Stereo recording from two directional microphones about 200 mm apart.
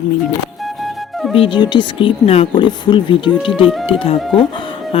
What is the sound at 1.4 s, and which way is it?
Speech, 25° left (ahead or behind).